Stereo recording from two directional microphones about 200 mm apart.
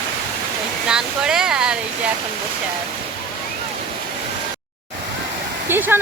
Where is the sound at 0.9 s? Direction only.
5° right (ahead or behind).